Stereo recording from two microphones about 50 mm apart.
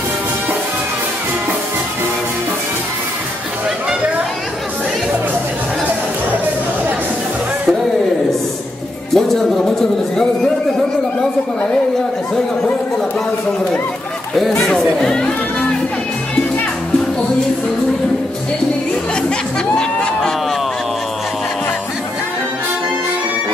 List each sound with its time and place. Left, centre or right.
9.1 s speech: centre
14.6 s speech: centre
19.2 s chatter: centre